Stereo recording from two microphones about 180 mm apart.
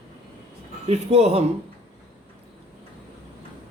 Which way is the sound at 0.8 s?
35° right (ahead or behind).